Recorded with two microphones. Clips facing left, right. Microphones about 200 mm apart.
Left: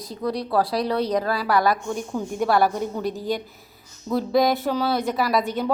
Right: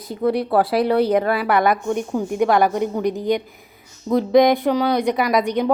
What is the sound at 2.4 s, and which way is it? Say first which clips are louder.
A woman's voice: right 3 dB; 15° right (ahead or behind).